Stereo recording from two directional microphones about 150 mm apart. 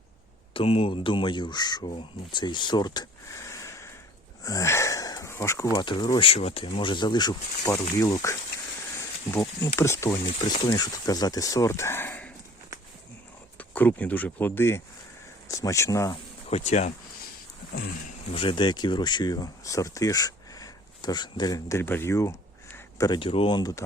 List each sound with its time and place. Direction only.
0.5 s speech: 40° left (ahead or behind); by 3.9 s 20° left (ahead or behind)
4.4 s wheeze: 20° left (ahead or behind)
5.7 s speech: 30° left (ahead or behind)
9.7 s speech: 20° left (ahead or behind)
10.2 s speech: 30° left (ahead or behind)
13.6 s speech: 10° left (ahead or behind)
16.5 s speech: 45° left (ahead or behind)
18.3 s speech: 35° left (ahead or behind)